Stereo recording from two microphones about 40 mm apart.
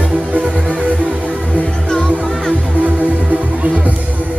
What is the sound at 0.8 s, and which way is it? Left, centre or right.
Music, left.